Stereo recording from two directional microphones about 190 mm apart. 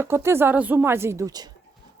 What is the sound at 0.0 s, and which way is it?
Speech, 15° right (ahead or behind).